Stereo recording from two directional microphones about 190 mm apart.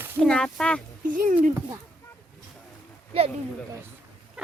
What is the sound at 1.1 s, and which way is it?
Speech, 45° right (ahead or behind).